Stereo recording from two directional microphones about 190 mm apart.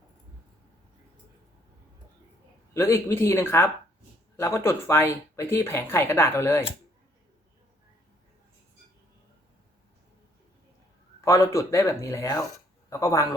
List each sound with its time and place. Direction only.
2.7 s speech: 15° left (ahead or behind)
11.3 s speech: 15° left (ahead or behind)